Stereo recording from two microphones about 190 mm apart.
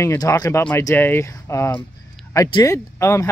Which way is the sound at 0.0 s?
15° left (ahead or behind).